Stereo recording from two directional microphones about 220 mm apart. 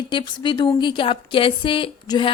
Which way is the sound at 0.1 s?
20° left (ahead or behind).